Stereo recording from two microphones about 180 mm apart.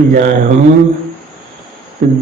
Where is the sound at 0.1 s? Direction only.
50° right (ahead or behind).